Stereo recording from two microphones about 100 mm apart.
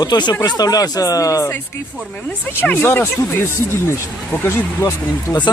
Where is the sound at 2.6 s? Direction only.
20° left (ahead or behind).